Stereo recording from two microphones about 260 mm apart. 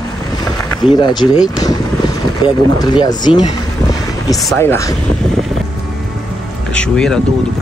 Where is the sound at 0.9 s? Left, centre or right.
Centre.